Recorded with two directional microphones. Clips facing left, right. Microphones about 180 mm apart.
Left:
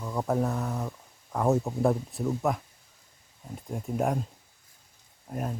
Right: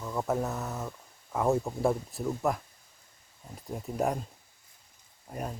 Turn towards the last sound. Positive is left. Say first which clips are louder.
# left 3 dB
turn(degrees=0)  # may be behind; listen again after turning